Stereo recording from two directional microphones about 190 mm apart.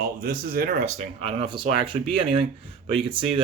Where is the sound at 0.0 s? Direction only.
50° right (ahead or behind).